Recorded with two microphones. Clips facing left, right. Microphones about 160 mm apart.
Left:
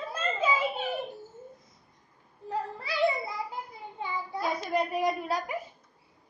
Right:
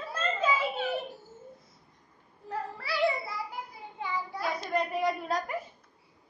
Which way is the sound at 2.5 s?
20° left (ahead or behind).